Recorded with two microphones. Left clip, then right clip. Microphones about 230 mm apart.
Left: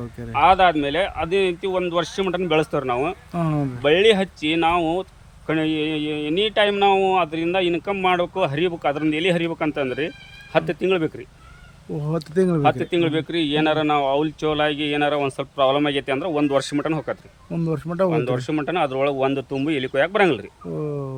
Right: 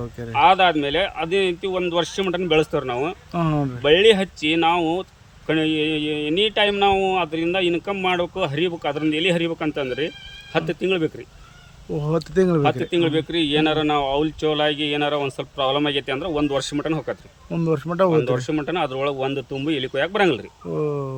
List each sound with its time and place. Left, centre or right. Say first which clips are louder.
0.3 s speech: even; centre
11.9 s speech: right 2 dB; centre
12.6 s speech: left 1 dB; centre
17.5 s speech: right 3 dB; centre
18.1 s speech: right 2 dB; centre
20.7 s speech: right 4 dB; centre